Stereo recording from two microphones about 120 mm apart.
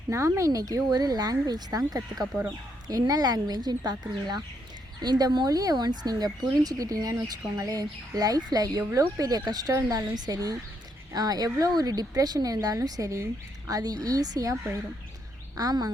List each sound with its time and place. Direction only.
0.1 s speech: 25° right (ahead or behind)